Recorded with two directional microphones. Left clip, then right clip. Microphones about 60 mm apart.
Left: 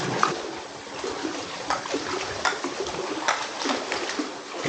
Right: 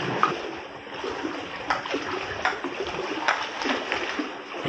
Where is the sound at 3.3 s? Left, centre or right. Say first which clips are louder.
Right 1 dB; centre.